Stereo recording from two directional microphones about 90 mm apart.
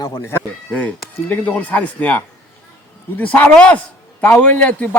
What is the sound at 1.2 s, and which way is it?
A man's voice, 20° left (ahead or behind).